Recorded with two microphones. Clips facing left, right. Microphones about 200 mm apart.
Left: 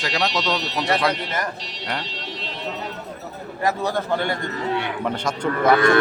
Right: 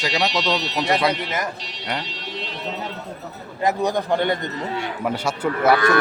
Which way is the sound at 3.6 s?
15° right (ahead or behind).